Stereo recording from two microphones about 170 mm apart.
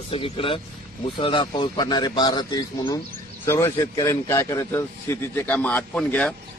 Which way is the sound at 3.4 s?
15° left (ahead or behind).